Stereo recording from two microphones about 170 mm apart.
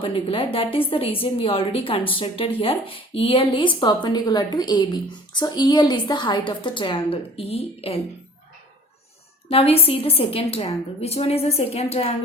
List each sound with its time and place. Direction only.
0.0 s a woman's voice: 30° left (ahead or behind)
9.5 s a woman's voice: 35° left (ahead or behind)